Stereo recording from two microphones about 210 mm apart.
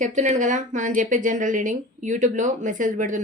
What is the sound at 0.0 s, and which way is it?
Speech, 35° right (ahead or behind).